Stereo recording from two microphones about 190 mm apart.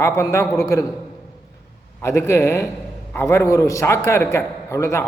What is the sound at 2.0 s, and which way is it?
A man's voice, 15° left (ahead or behind).